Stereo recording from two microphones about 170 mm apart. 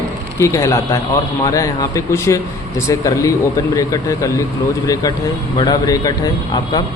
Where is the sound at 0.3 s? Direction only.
15° left (ahead or behind).